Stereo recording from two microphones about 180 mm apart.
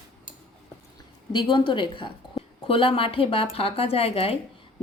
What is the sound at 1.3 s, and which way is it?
A woman's voice, 25° left (ahead or behind).